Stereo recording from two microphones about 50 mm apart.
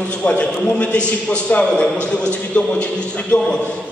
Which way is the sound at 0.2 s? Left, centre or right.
Left.